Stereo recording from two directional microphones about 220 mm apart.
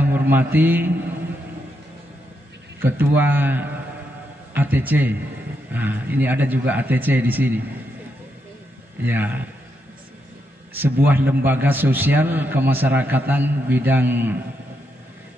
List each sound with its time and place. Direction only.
0.0 s a man's voice: 10° right (ahead or behind)
2.8 s a man's voice: 10° right (ahead or behind)
9.0 s a man's voice: 10° right (ahead or behind)
11.1 s a man's voice: 10° right (ahead or behind)